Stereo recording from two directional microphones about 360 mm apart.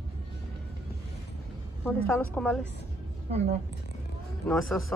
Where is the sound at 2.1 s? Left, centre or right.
Centre.